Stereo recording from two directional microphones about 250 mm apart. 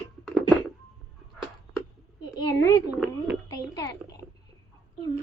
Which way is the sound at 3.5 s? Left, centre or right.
Centre.